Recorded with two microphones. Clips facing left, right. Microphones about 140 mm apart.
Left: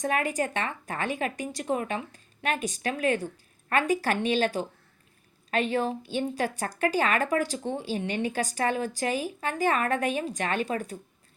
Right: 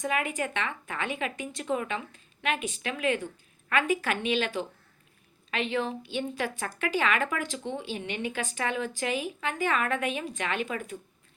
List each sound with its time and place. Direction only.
0.0 s a woman's voice: 40° left (ahead or behind)